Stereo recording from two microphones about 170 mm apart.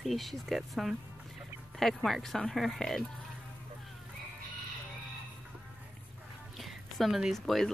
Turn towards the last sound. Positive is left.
turn(degrees=0)  # may be behind; listen again after turning